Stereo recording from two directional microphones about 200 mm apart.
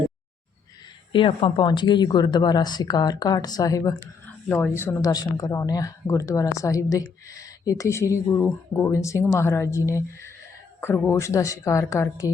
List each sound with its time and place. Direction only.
1.1 s speech: 25° left (ahead or behind)